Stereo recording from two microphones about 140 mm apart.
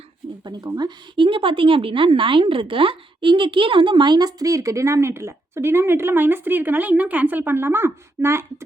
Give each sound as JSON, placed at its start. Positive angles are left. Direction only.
{"t": 0.8, "sound": "a woman's voice", "side_deg": -35}